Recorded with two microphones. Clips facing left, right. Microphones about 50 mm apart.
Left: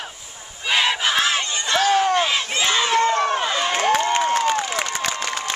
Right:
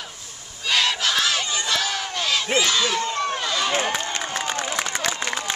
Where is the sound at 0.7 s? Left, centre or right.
Left.